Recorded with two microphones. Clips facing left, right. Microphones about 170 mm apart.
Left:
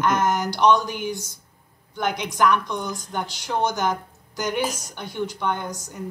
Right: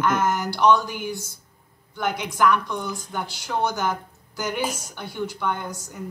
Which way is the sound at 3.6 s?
15° left (ahead or behind).